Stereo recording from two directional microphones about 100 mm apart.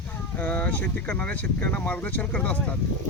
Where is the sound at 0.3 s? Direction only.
15° left (ahead or behind).